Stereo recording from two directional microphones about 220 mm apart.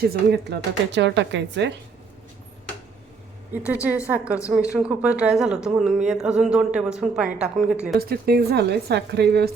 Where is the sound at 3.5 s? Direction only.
5° right (ahead or behind).